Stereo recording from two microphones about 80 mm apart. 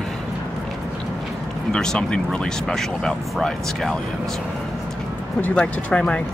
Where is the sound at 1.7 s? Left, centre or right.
Centre.